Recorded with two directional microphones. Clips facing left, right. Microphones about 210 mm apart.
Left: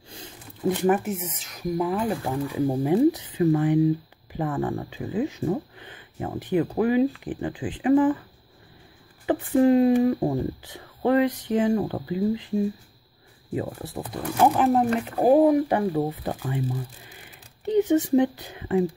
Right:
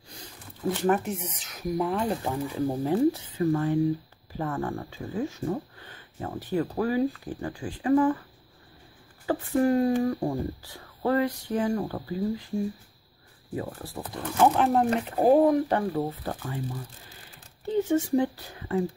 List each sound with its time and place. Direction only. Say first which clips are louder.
0.8 s speech: left 1 dB; 5° left (ahead or behind)
2.6 s speech: left 4 dB; 15° left (ahead or behind)
9.2 s speech: left 4 dB; 20° left (ahead or behind)
17.6 s speech: left 4 dB; 20° left (ahead or behind)